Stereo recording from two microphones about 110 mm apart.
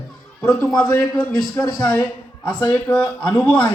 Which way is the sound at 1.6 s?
35° left (ahead or behind).